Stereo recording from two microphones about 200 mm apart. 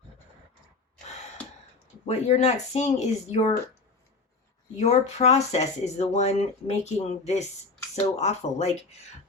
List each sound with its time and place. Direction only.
2.0 s speech: 35° left (ahead or behind)
4.8 s speech: 35° left (ahead or behind)